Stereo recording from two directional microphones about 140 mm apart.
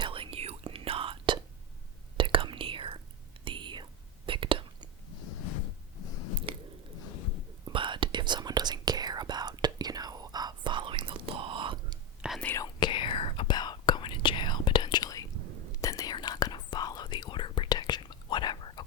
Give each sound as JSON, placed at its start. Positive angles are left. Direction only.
{"t": 0.0, "sound": "whispering", "side_deg": -40}
{"t": 6.5, "sound": "chewing", "side_deg": -40}
{"t": 7.7, "sound": "whispering", "side_deg": -35}
{"t": 12.2, "sound": "whispering", "side_deg": -5}
{"t": 12.5, "sound": "whispering", "side_deg": 30}